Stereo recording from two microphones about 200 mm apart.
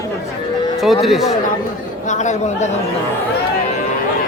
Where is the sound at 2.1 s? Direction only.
35° left (ahead or behind).